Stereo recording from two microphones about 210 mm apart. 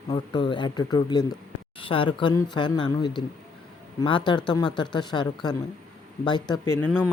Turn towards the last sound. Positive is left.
turn(degrees=10)  # may be behind; listen again after turning